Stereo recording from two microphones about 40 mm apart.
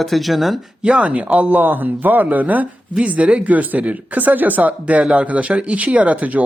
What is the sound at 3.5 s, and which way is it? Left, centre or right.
Speech, right.